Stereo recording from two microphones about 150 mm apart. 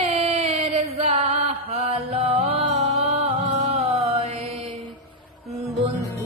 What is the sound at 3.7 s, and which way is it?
Mantra, 40° right (ahead or behind).